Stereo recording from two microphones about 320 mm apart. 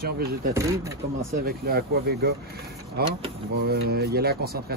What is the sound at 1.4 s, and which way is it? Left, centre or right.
Speech, right.